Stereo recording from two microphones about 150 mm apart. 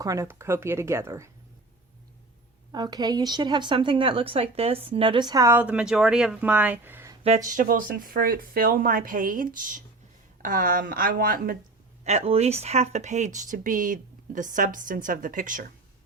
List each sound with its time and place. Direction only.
0.0 s a woman's voice: 20° right (ahead or behind)
2.7 s a woman's voice: 25° right (ahead or behind)
5.5 s a woman's voice: 10° right (ahead or behind)
7.3 s speech: 60° right (ahead or behind)
12.0 s speech: 45° right (ahead or behind); by 15.7 s 65° right (ahead or behind)